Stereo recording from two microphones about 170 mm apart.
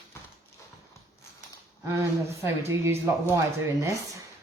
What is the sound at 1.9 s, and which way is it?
Speech, 15° right (ahead or behind).